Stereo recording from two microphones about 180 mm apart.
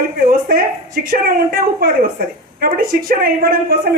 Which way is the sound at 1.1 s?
55° right (ahead or behind).